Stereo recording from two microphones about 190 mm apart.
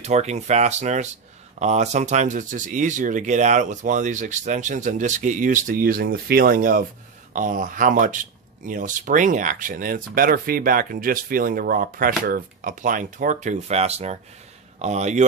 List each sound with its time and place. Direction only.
0.0 s speech: 35° right (ahead or behind)